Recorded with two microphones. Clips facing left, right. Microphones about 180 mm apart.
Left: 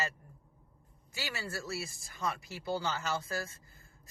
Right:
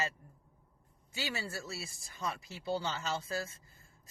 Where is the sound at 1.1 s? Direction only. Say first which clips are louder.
Right 1 dB; 20° right (ahead or behind).